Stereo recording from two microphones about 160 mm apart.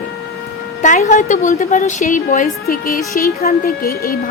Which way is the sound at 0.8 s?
50° left (ahead or behind).